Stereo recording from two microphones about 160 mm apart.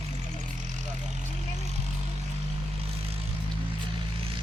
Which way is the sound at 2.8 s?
35° right (ahead or behind).